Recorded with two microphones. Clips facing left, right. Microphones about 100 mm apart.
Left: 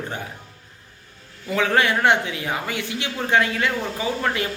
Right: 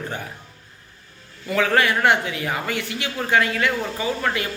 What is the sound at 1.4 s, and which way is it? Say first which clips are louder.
A man's voice: right 1 dB; 20° left (ahead or behind).